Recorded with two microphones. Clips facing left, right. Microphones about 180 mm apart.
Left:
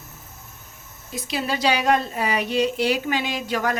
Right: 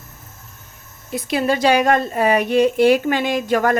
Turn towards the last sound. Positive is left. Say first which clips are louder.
# right 7 dB
turn(degrees=-50)  # may be behind; listen again after turning